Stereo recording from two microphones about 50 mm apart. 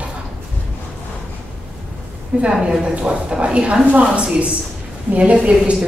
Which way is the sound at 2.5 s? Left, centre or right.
Centre.